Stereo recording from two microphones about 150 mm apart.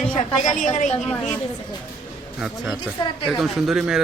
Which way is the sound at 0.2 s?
55° left (ahead or behind).